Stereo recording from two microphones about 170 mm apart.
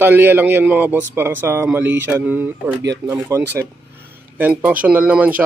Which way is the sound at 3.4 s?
85° right.